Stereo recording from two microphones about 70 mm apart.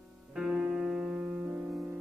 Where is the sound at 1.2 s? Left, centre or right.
Right.